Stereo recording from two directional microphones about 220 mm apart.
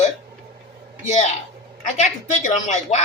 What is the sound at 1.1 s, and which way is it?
A woman's voice, 30° left (ahead or behind).